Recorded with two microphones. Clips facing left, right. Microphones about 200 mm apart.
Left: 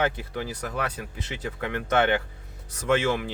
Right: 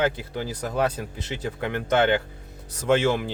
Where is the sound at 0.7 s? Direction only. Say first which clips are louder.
Right 6 dB; 35° right (ahead or behind).